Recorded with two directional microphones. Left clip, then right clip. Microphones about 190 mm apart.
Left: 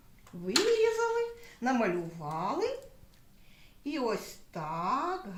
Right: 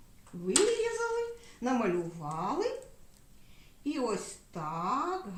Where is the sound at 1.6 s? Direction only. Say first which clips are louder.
Left 2 dB; 25° left (ahead or behind).